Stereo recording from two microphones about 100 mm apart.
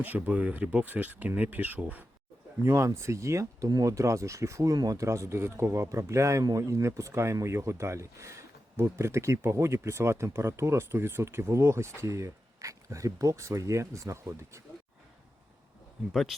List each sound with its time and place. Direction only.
0.0 s speech: 20° right (ahead or behind)
2.6 s speech: 30° right (ahead or behind)